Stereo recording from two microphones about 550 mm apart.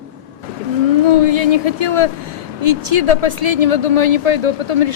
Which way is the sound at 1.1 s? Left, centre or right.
Right.